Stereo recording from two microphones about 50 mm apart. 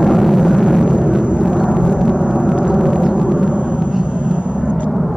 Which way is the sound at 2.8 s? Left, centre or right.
Centre.